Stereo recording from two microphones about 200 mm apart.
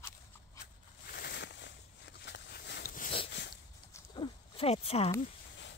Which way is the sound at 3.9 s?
20° left (ahead or behind).